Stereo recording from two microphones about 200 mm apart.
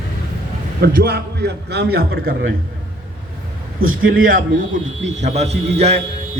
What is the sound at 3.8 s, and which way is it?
A man's voice, 45° right (ahead or behind).